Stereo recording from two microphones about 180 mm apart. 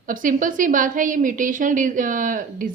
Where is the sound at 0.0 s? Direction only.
50° right (ahead or behind).